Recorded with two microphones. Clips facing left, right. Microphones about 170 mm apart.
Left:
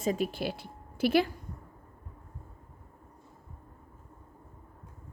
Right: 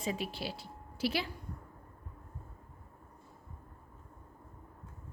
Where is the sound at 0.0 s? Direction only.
45° left (ahead or behind).